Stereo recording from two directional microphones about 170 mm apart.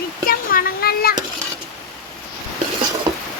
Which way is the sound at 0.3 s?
60° left (ahead or behind).